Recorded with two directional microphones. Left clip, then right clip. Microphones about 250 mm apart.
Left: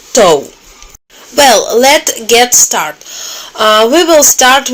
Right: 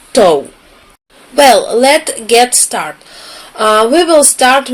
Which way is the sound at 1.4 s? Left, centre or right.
Left.